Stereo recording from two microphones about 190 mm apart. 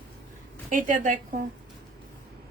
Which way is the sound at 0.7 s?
45° right (ahead or behind).